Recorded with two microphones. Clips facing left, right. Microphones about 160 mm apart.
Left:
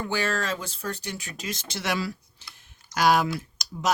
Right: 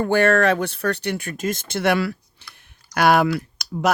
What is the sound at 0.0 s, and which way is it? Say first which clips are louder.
Speech: right 11 dB; 55° right (ahead or behind).